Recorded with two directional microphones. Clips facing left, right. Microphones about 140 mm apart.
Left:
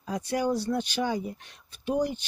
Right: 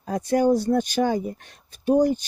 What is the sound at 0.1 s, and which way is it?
Speech, 45° right (ahead or behind).